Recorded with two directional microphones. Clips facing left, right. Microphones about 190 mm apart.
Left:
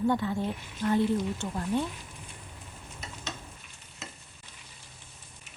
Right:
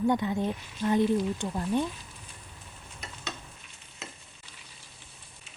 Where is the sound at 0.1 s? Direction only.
15° right (ahead or behind).